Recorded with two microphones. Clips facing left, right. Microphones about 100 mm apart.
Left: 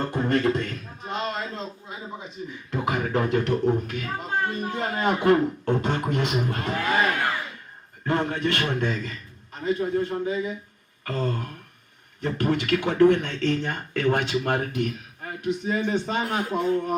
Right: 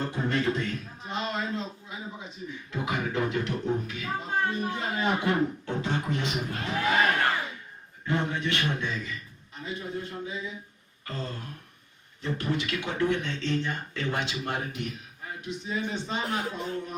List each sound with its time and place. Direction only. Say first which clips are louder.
0.0 s a man's voice: left 5 dB; 50° left (ahead or behind)
2.8 s a man's voice: left 4 dB; 50° left (ahead or behind)
8.0 s a man's voice: left 4 dB; 50° left (ahead or behind)
11.0 s gasp: left 9 dB; 60° left (ahead or behind)
12.2 s a man's voice: left 5 dB; 55° left (ahead or behind)